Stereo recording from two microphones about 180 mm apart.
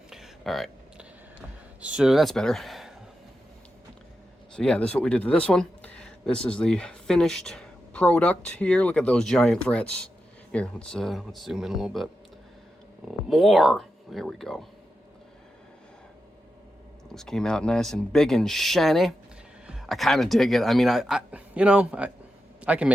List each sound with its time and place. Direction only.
0.1 s a sound: centre (ahead or behind)
4.5 s speech: 5° left (ahead or behind)
13.1 s speech: centre (ahead or behind)
17.2 s a man's voice: 5° left (ahead or behind)